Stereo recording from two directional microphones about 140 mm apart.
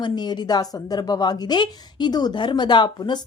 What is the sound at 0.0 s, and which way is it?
A woman's voice, 30° left (ahead or behind).